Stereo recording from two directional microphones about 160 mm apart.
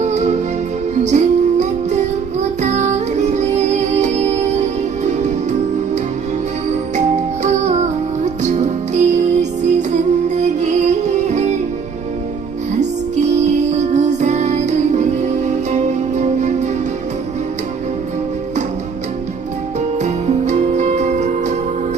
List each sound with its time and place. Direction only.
0.0 s music: 45° right (ahead or behind)
7.4 s music: 45° right (ahead or behind)
13.1 s music: 45° right (ahead or behind)
20.0 s music: 45° right (ahead or behind)